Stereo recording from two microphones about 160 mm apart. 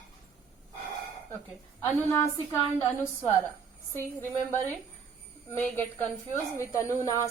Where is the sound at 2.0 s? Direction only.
15° left (ahead or behind).